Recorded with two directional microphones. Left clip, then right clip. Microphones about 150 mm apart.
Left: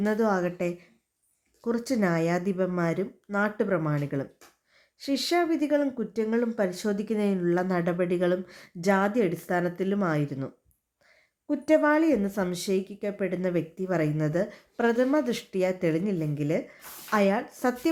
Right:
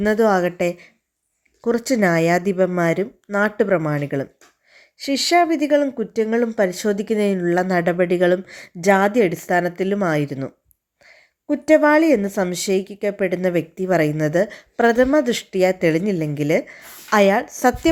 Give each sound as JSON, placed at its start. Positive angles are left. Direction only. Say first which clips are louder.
{"t": 0.0, "sound": "a woman's voice", "louder": "right 9 dB", "side_deg": -35}